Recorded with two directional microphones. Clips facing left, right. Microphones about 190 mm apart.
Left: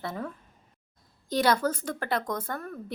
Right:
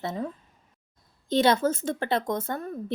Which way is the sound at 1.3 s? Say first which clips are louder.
Right 3 dB; 25° right (ahead or behind).